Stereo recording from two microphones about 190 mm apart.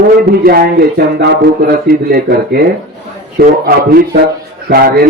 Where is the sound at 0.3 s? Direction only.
55° right (ahead or behind).